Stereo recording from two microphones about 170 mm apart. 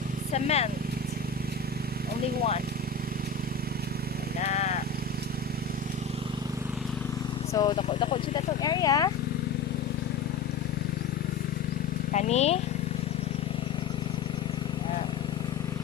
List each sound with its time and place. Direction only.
0.3 s speech: 40° left (ahead or behind)
4.4 s vehicle: 45° left (ahead or behind)
7.5 s speech: 20° left (ahead or behind)
12.1 s speech: 40° left (ahead or behind)